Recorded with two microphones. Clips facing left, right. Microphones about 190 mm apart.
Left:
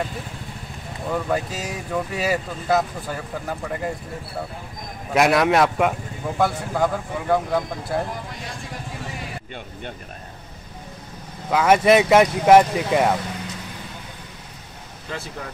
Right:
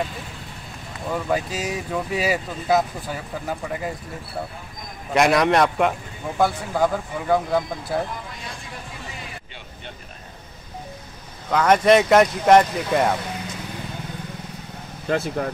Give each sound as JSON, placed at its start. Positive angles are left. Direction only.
{"t": 1.1, "sound": "speech", "side_deg": 0}
{"t": 5.1, "sound": "speech", "side_deg": 0}
{"t": 11.5, "sound": "speech", "side_deg": 5}
{"t": 15.0, "sound": "speech", "side_deg": -50}